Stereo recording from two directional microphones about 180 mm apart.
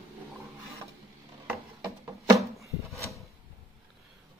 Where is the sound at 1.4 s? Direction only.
20° right (ahead or behind).